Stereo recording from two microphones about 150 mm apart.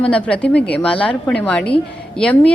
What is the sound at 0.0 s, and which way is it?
A woman's voice, 10° left (ahead or behind).